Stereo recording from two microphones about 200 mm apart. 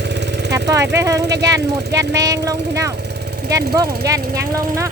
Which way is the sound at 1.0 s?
15° right (ahead or behind).